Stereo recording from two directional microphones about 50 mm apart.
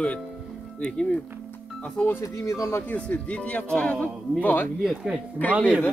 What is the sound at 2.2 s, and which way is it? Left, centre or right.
Speech, left.